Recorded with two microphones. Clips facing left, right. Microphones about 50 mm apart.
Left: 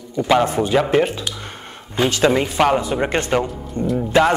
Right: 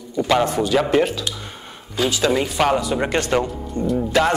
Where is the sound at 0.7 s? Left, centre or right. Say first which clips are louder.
Left 1 dB; centre.